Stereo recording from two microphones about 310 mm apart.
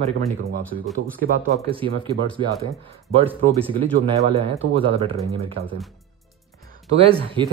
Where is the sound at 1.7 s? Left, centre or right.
Centre.